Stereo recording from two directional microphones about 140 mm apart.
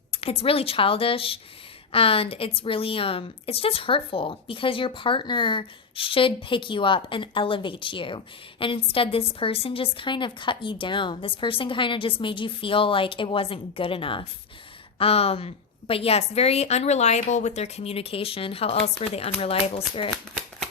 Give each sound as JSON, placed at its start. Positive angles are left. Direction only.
{"t": 0.1, "sound": "a woman's voice", "side_deg": 45}